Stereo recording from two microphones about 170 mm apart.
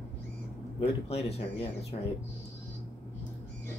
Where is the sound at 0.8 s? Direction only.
35° left (ahead or behind).